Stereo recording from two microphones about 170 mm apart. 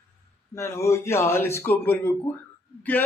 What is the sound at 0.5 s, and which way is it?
A man's voice, 15° left (ahead or behind).